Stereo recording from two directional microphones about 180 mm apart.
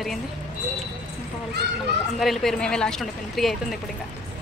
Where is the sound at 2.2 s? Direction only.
Centre (ahead or behind).